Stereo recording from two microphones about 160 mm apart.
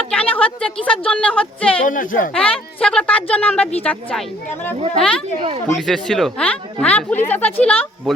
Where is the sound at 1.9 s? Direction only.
60° left (ahead or behind).